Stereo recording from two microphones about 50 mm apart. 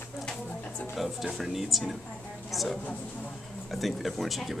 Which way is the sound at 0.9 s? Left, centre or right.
Centre.